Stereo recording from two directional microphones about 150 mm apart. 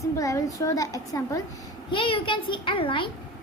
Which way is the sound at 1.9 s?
35° left (ahead or behind).